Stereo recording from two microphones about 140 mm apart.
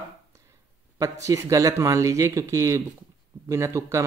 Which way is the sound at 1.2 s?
25° right (ahead or behind).